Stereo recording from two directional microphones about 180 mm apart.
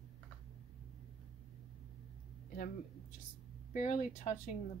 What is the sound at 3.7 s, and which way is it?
Speech, 40° left (ahead or behind).